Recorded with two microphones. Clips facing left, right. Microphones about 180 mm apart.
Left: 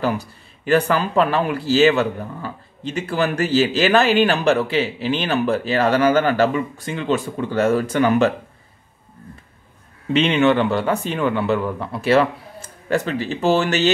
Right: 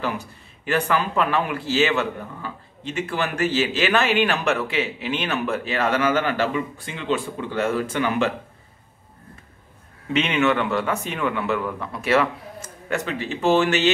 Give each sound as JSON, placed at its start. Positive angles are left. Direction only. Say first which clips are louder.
{"t": 0.0, "sound": "speech", "louder": "left 5 dB", "side_deg": 35}
{"t": 10.1, "sound": "speech", "louder": "left 5 dB", "side_deg": 30}